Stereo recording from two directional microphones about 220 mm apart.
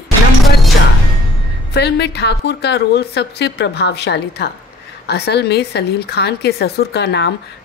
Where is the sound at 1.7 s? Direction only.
50° left (ahead or behind).